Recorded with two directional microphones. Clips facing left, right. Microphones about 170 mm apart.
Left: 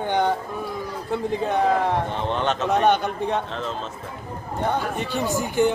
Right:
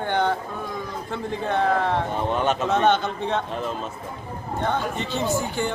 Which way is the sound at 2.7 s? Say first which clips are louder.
Left 2 dB; 15° left (ahead or behind).